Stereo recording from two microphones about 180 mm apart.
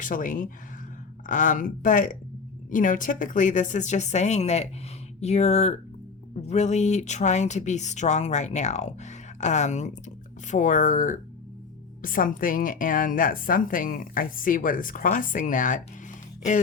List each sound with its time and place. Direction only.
0.0 s a woman's voice: 45° left (ahead or behind)